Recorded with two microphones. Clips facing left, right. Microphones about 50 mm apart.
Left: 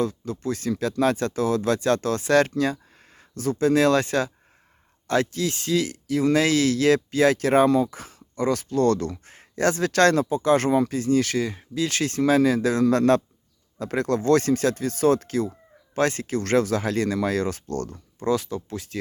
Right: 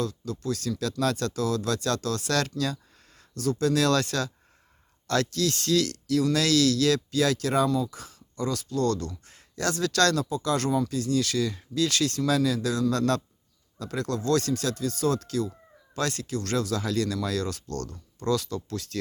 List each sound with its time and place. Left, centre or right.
0.0 s speech: left